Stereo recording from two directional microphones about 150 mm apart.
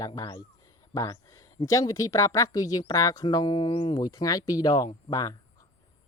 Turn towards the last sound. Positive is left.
turn(degrees=25)  # may be behind; listen again after turning